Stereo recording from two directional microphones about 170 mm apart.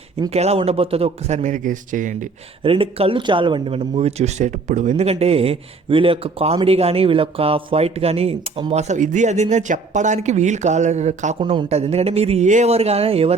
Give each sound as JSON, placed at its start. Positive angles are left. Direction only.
{"t": 0.3, "sound": "speech", "side_deg": -40}
{"t": 2.6, "sound": "speech", "side_deg": -35}
{"t": 11.3, "sound": "speech", "side_deg": -30}